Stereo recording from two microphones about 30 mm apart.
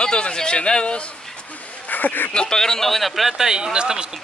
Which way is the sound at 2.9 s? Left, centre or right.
Centre.